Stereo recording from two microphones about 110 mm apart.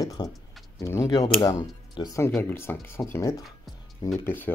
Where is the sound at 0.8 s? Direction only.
30° left (ahead or behind).